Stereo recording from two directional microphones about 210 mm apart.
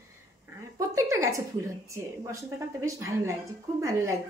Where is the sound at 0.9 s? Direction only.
15° right (ahead or behind).